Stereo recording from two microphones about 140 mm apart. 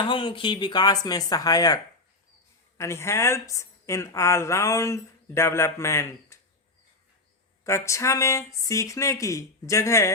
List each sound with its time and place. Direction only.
0.0 s a woman's voice: 35° left (ahead or behind); by 6.4 s 20° left (ahead or behind)
7.6 s a woman's voice: 20° left (ahead or behind)